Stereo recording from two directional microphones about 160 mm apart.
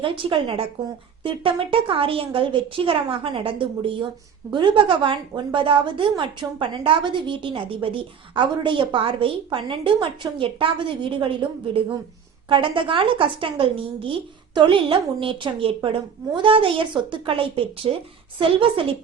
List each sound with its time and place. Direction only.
0.0 s a woman's voice: 35° right (ahead or behind)